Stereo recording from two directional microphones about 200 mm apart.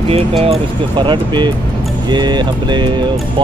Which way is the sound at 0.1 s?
30° right (ahead or behind).